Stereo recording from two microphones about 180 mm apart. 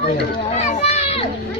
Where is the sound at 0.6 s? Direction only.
35° left (ahead or behind).